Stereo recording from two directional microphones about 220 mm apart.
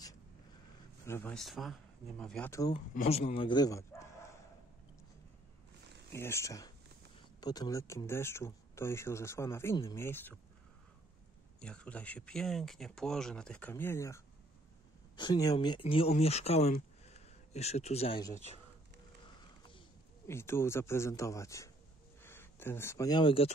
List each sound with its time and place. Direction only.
1.0 s speech: 10° left (ahead or behind)
2.9 s speech: 30° left (ahead or behind); by 4.1 s 15° left (ahead or behind)
6.1 s speech: 10° left (ahead or behind)
11.6 s speech: 5° left (ahead or behind); by 18.6 s 30° left (ahead or behind)
20.2 s speech: 10° left (ahead or behind)